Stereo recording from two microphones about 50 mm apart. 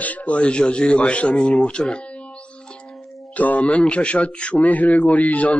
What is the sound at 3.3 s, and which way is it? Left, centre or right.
Speech, left.